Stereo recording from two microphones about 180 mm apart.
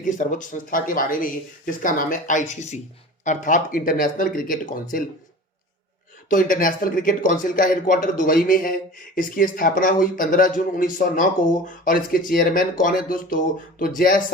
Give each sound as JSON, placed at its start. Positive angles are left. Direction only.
{"t": 0.0, "sound": "speech", "side_deg": 45}
{"t": 6.2, "sound": "speech", "side_deg": 50}